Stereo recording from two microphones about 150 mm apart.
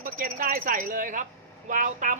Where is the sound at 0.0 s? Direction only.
65° right (ahead or behind).